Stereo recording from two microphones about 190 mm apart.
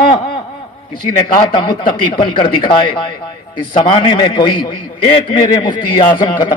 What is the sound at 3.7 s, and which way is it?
A man's voice, 25° left (ahead or behind).